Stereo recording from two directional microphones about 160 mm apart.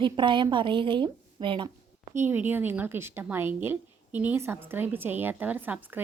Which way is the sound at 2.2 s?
10° right (ahead or behind).